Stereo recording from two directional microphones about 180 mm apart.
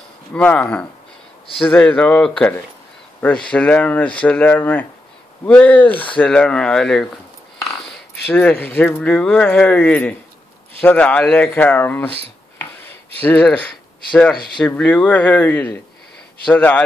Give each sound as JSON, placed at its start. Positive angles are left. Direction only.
{"t": 0.3, "sound": "speech", "side_deg": 5}
{"t": 13.2, "sound": "speech", "side_deg": 10}